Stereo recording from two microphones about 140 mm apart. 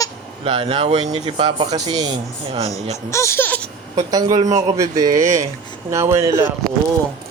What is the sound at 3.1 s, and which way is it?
Speech, 20° left (ahead or behind).